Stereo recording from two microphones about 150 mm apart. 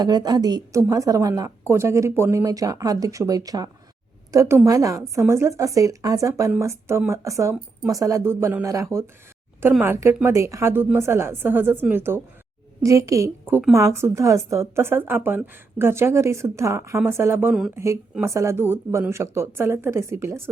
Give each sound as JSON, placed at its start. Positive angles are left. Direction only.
{"t": 0.0, "sound": "a woman's voice", "side_deg": -25}